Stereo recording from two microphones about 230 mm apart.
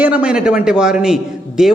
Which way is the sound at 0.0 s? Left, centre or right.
Centre.